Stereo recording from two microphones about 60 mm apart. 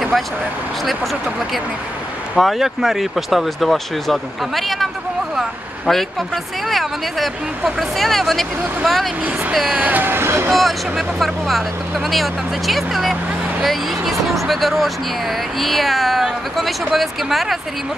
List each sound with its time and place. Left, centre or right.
2.3 s speech: centre
5.9 s speech: centre
9.8 s speech: right
10.5 s speech: centre